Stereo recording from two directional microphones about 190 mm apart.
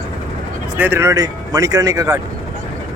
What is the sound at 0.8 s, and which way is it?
Speech, 10° right (ahead or behind).